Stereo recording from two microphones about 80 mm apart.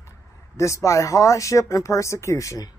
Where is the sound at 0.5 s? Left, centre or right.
Left.